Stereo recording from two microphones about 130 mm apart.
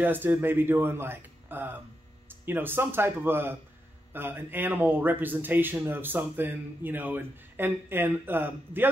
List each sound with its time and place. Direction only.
0.0 s speech: 15° right (ahead or behind)